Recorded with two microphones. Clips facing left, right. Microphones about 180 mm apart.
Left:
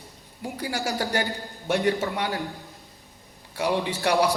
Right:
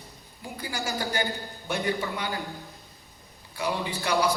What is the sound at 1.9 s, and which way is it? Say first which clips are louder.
Speech: left 4 dB; 75° left (ahead or behind).